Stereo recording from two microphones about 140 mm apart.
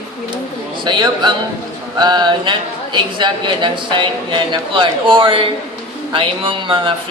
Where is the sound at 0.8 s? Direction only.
35° right (ahead or behind).